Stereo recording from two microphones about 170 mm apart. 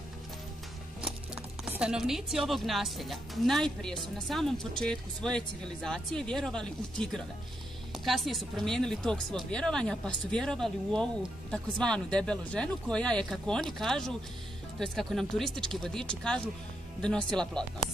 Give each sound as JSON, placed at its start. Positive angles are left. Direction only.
{"t": 1.0, "sound": "speech", "side_deg": -5}